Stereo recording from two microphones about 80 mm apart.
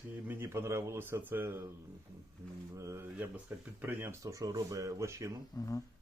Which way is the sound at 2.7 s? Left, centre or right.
Right.